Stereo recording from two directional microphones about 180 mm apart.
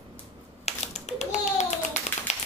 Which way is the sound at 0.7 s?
40° left (ahead or behind).